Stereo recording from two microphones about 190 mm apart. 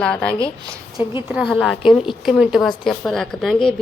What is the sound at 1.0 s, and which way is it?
Speech, 25° left (ahead or behind).